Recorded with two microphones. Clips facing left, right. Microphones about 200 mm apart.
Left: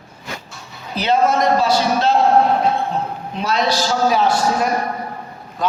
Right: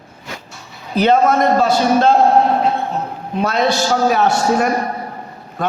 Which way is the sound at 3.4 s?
55° right (ahead or behind).